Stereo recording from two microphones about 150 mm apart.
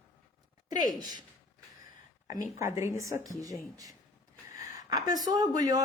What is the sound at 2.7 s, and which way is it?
Humming, 20° right (ahead or behind).